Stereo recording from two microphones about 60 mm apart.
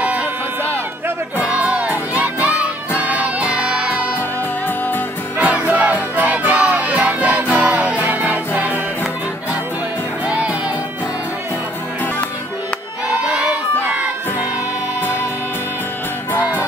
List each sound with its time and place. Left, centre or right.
0.0 s a sound: right
1.4 s music: right
4.6 s music: left
5.4 s music: right
10.2 s music: right
13.1 s crowd: centre